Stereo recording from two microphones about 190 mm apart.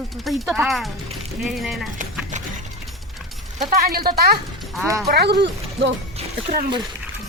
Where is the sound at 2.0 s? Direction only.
40° right (ahead or behind).